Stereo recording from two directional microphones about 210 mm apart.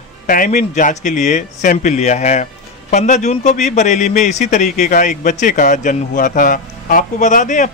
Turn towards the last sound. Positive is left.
turn(degrees=35)  # may be behind; listen again after turning